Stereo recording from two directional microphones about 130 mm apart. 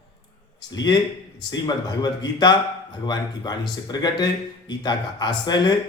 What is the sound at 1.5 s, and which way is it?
A man's voice, 35° left (ahead or behind).